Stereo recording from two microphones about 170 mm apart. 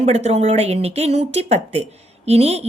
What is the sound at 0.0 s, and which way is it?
A woman's voice, 40° right (ahead or behind).